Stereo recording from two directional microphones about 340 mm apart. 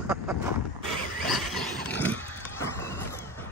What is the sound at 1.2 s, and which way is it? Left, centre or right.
Vehicle, right.